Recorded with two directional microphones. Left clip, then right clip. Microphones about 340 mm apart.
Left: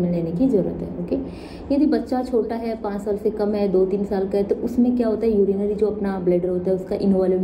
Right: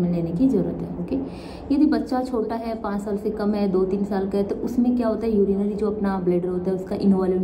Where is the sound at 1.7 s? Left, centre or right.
Centre.